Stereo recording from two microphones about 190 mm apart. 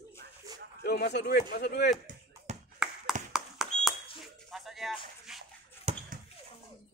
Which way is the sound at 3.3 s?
Centre (ahead or behind).